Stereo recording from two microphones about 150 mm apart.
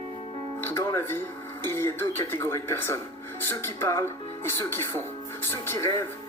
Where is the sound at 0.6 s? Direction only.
15° left (ahead or behind).